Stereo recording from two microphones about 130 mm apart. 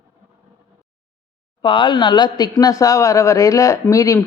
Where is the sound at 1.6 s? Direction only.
40° left (ahead or behind).